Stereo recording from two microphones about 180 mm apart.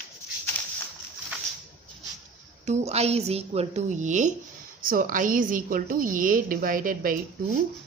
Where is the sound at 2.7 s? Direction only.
35° right (ahead or behind).